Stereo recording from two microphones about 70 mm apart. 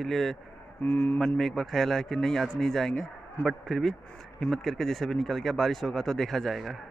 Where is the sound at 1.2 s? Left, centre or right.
Centre.